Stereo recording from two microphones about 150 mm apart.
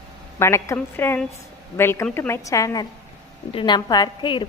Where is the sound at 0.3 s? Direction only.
20° left (ahead or behind).